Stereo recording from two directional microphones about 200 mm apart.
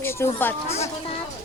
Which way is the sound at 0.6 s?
30° left (ahead or behind).